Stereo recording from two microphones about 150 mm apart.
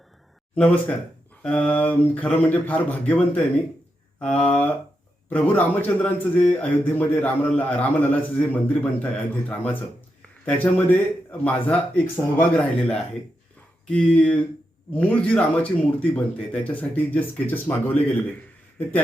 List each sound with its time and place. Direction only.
0.5 s a man's voice: 5° left (ahead or behind)